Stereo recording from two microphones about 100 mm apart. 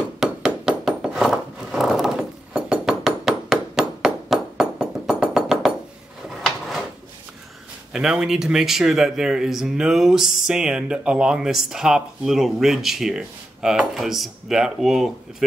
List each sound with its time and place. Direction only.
0.2 s a sound: 5° right (ahead or behind)
6.2 s drawer open or close: centre (ahead or behind)
7.9 s speech: 5° right (ahead or behind)